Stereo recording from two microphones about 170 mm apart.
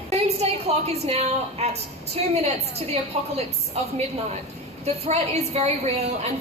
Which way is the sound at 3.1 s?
35° right (ahead or behind).